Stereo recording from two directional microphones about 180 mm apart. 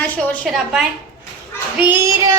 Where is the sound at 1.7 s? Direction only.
10° right (ahead or behind).